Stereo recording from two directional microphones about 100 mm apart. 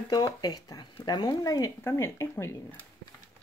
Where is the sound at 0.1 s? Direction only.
40° left (ahead or behind).